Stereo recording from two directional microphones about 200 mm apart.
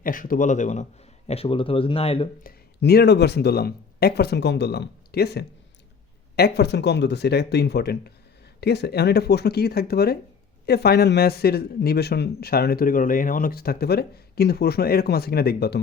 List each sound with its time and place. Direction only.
0.0 s speech: 45° left (ahead or behind); by 2.3 s 30° left (ahead or behind)
2.4 s a man's voice: 50° left (ahead or behind)